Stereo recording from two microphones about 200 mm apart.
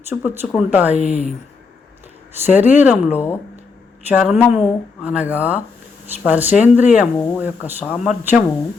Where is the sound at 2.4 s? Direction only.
10° right (ahead or behind).